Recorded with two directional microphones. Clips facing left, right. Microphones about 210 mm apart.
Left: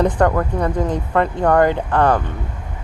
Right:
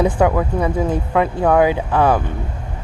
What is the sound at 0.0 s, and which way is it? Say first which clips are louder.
Speech: right 1 dB; 5° right (ahead or behind).